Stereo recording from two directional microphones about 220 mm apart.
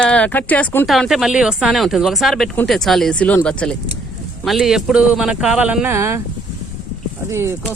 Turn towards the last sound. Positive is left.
turn(degrees=-15)  # may be behind; listen again after turning